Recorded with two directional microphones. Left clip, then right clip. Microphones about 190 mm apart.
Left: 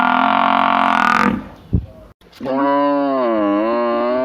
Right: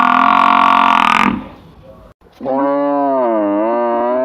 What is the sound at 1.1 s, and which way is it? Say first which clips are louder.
Cattle: right 3 dB; 65° left (ahead or behind).